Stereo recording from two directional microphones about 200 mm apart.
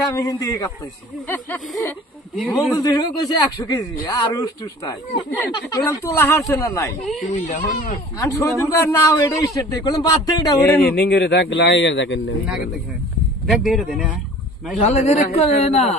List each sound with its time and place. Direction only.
0.1 s a man's voice: 15° left (ahead or behind)
7.2 s a man's voice: 35° left (ahead or behind)
8.2 s a man's voice: 15° left (ahead or behind)
10.8 s speech: 50° left (ahead or behind)
13.5 s speech: centre (ahead or behind)
14.8 s a man's voice: 35° left (ahead or behind)